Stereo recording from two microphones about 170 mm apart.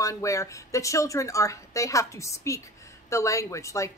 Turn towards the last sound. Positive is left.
turn(degrees=20)  # may be behind; listen again after turning